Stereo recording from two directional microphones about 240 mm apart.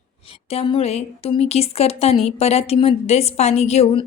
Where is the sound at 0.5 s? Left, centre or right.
Left.